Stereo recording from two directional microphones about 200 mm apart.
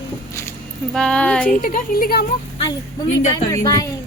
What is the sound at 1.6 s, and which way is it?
Speech, 45° left (ahead or behind).